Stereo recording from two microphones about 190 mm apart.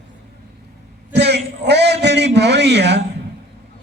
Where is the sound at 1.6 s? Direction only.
65° right (ahead or behind).